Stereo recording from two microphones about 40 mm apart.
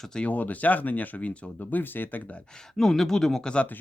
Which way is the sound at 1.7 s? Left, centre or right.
Left.